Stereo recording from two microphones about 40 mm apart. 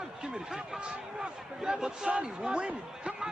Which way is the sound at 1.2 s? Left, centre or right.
Centre.